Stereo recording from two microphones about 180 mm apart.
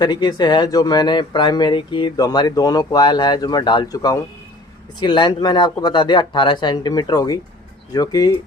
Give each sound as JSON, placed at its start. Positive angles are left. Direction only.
{"t": 0.0, "sound": "speech", "side_deg": 25}